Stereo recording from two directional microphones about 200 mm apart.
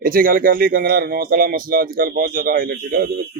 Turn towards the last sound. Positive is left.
turn(degrees=-50)  # may be behind; listen again after turning